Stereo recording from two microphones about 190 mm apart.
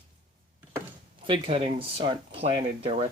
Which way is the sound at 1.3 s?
30° right (ahead or behind).